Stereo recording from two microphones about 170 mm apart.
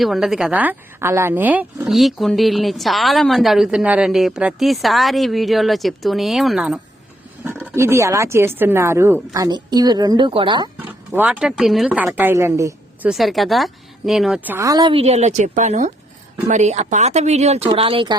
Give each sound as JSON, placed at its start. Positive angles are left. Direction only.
{"t": 0.0, "sound": "speech", "side_deg": 0}
{"t": 7.4, "sound": "speech", "side_deg": -15}
{"t": 11.1, "sound": "speech", "side_deg": -10}
{"t": 13.1, "sound": "speech", "side_deg": 0}